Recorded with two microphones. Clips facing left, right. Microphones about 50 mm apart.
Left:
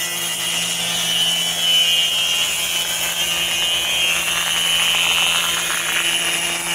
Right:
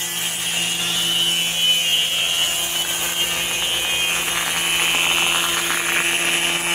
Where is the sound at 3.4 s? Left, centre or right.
Left.